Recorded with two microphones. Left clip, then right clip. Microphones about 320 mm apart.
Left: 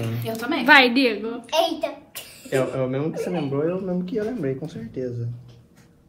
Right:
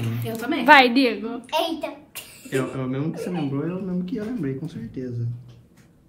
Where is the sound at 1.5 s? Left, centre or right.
Centre.